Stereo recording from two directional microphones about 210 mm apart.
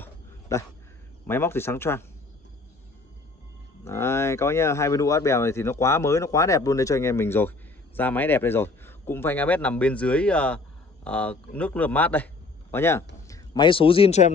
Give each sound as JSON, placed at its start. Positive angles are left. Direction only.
{"t": 0.0, "sound": "dog", "side_deg": 15}
{"t": 1.2, "sound": "speech", "side_deg": 10}
{"t": 3.8, "sound": "a man's voice", "side_deg": 10}